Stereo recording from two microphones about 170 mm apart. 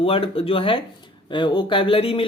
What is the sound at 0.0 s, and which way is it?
Speech, 35° left (ahead or behind).